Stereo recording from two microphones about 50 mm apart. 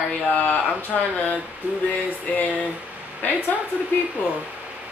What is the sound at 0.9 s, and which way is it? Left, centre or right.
Speech, centre.